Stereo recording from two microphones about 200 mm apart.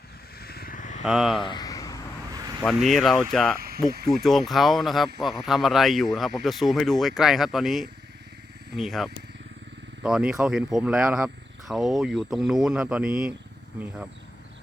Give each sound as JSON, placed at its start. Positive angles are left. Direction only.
{"t": 0.4, "sound": "vehicle", "side_deg": 50}
{"t": 1.0, "sound": "speech", "side_deg": 0}
{"t": 1.4, "sound": "a sound", "side_deg": 20}
{"t": 2.6, "sound": "speech", "side_deg": 0}